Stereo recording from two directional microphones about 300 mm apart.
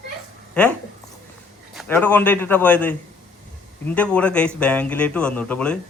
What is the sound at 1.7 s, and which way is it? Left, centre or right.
Speech, centre.